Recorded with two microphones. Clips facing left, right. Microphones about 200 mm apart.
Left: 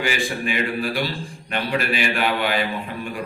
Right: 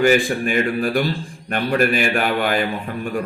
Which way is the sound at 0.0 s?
45° right (ahead or behind).